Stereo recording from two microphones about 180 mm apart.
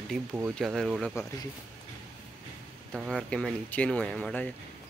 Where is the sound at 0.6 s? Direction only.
Centre (ahead or behind).